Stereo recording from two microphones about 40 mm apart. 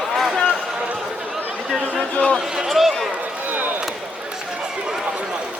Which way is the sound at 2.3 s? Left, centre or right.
Centre.